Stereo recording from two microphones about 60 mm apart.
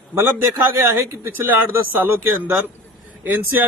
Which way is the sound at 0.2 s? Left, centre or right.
Right.